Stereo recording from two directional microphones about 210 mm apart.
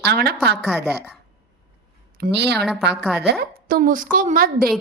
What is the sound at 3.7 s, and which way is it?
Speech, 40° right (ahead or behind).